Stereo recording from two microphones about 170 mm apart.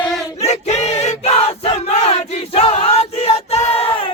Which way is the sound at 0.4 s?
40° left (ahead or behind).